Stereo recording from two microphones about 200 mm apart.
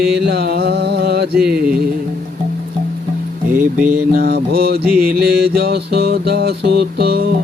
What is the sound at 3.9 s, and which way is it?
Music, 50° right (ahead or behind).